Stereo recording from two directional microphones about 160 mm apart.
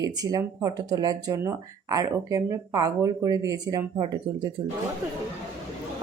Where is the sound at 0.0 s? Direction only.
20° right (ahead or behind).